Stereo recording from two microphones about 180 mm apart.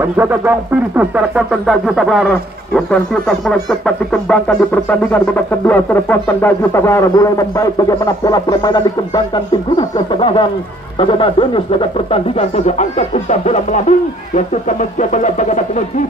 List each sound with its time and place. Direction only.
0.0 s music: 10° right (ahead or behind); by 10.5 s 30° left (ahead or behind)
11.0 s speech: 30° left (ahead or behind); by 15.8 s 45° left (ahead or behind)